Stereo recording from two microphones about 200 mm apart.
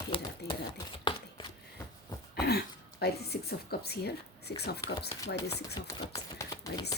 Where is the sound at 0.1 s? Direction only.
25° left (ahead or behind).